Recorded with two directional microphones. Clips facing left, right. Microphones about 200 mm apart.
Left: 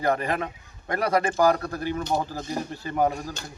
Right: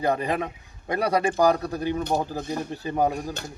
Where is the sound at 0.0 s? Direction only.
15° right (ahead or behind).